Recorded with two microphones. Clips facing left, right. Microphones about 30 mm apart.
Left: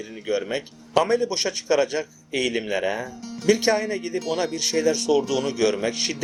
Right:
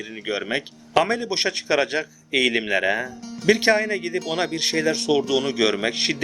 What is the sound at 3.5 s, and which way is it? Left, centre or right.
Speech, right.